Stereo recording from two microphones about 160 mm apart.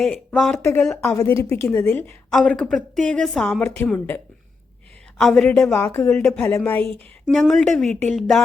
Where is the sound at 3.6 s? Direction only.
15° left (ahead or behind).